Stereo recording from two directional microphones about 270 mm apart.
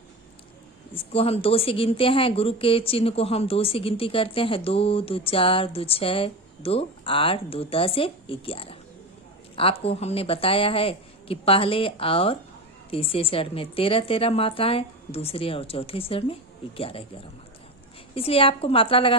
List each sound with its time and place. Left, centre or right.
0.9 s a woman's voice: left